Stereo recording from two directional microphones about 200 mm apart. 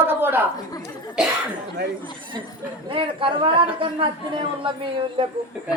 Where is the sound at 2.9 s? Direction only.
25° right (ahead or behind).